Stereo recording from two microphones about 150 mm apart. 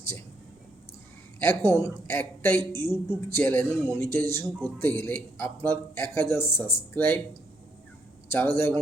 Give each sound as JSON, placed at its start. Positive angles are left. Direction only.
{"t": 1.4, "sound": "a man's voice", "side_deg": 15}
{"t": 8.3, "sound": "a man's voice", "side_deg": 15}